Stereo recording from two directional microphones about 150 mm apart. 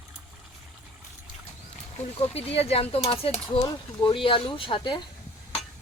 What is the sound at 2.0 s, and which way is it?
Speech, 45° left (ahead or behind).